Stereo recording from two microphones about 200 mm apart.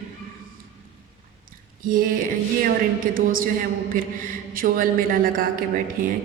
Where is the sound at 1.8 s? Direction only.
45° right (ahead or behind).